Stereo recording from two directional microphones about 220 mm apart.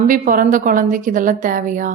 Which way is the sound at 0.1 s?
40° right (ahead or behind).